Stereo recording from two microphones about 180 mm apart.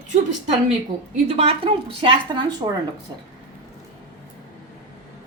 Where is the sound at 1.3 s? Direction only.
35° right (ahead or behind).